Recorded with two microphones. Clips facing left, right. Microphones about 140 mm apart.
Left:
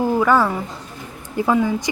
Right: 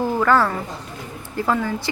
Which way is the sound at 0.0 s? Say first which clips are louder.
Left 2 dB; 15° left (ahead or behind).